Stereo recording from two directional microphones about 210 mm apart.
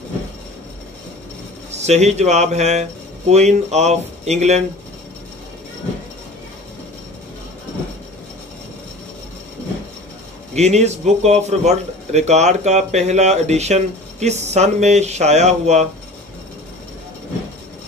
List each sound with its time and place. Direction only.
1.7 s speech: 30° right (ahead or behind)
10.5 s speech: 30° right (ahead or behind)